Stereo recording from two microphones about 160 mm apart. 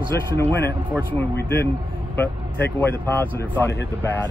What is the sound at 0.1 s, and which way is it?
Speech, 15° left (ahead or behind).